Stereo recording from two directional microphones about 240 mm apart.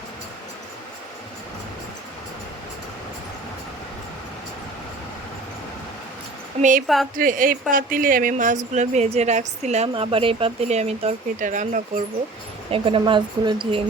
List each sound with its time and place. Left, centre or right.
6.6 s speech: right
6.8 s speech: centre
7.2 s a woman's voice: right
12.7 s a woman's voice: right